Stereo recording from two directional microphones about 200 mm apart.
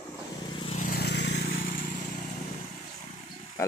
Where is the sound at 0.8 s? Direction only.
50° left (ahead or behind).